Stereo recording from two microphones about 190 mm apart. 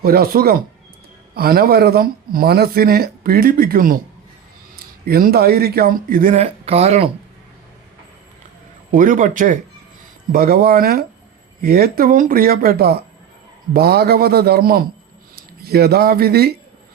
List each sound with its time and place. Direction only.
0.0 s speech: 50° right (ahead or behind)
5.0 s speech: 55° right (ahead or behind)
6.4 s speech: 35° right (ahead or behind)
8.9 s a man's voice: 45° right (ahead or behind)